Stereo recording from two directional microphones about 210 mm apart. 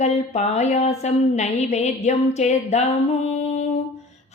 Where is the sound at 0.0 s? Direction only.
30° left (ahead or behind).